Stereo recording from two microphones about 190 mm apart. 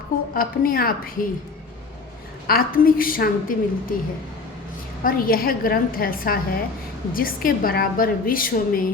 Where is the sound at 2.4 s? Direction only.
50° left (ahead or behind).